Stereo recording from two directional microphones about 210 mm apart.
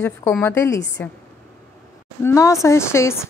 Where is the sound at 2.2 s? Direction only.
15° left (ahead or behind).